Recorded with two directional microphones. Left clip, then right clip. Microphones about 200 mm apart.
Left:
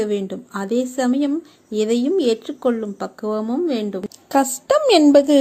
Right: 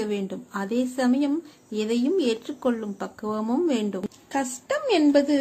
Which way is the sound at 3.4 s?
10° left (ahead or behind).